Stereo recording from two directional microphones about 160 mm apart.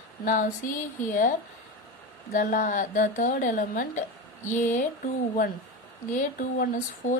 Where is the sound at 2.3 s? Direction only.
55° left (ahead or behind).